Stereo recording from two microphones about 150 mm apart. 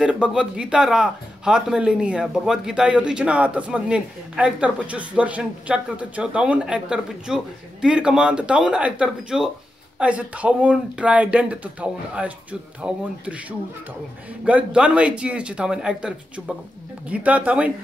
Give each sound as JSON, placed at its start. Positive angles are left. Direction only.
{"t": 0.0, "sound": "speech", "side_deg": -5}